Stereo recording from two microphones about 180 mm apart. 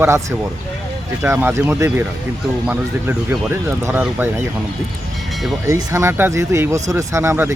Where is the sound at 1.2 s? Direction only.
15° right (ahead or behind).